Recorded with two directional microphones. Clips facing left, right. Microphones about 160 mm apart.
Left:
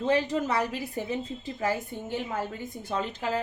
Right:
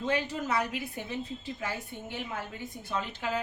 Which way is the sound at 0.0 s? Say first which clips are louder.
Left 5 dB; 35° left (ahead or behind).